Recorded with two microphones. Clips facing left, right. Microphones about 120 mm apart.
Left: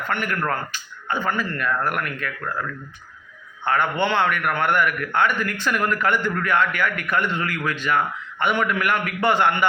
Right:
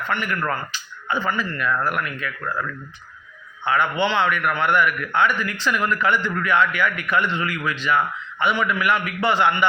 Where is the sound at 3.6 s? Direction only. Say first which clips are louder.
Right 1 dB; 50° left (ahead or behind).